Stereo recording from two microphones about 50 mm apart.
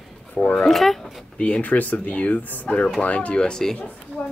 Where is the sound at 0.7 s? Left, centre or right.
Centre.